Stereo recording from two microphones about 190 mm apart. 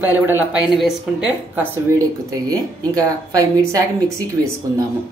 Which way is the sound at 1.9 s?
20° right (ahead or behind).